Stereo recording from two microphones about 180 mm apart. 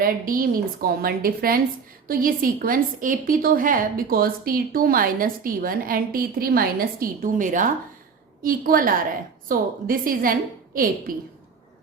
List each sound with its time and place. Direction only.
0.0 s a woman's voice: 50° right (ahead or behind)